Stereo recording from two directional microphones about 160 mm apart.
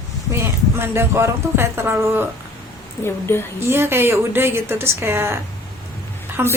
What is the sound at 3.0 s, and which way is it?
Speech, 15° left (ahead or behind).